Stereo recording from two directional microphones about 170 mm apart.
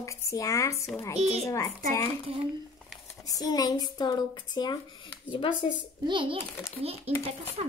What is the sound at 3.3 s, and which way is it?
Speech, 20° left (ahead or behind).